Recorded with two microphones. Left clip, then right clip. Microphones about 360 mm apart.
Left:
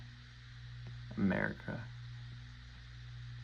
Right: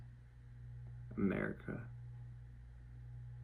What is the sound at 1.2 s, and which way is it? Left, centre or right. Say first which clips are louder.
Speech: left 3 dB; centre.